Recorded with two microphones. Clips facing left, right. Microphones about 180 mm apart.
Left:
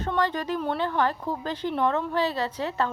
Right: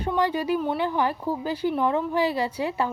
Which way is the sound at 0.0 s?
10° right (ahead or behind).